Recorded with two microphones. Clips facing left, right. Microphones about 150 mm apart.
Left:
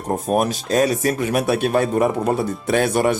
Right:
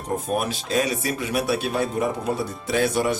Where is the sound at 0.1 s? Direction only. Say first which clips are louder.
Left 5 dB; 45° left (ahead or behind).